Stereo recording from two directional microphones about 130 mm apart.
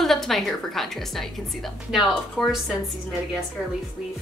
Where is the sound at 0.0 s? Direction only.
Centre (ahead or behind).